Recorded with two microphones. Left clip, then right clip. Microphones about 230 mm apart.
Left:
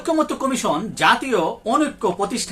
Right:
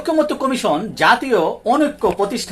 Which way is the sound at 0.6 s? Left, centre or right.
Centre.